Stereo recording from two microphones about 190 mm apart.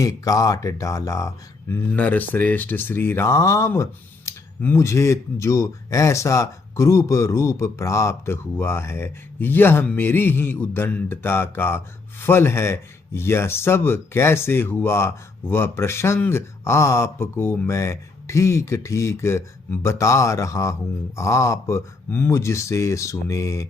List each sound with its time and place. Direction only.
0.0 s speech: 15° left (ahead or behind)